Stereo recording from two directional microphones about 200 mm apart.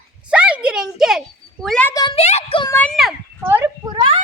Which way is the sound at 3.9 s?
25° right (ahead or behind).